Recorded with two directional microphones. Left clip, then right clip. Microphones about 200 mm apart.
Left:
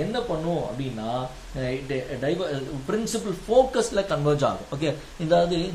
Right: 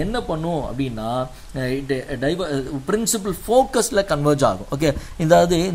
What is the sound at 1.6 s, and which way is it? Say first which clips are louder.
Speech: right 5 dB; 50° right (ahead or behind).